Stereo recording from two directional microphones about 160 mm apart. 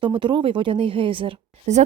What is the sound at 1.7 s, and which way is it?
Speech, 45° right (ahead or behind).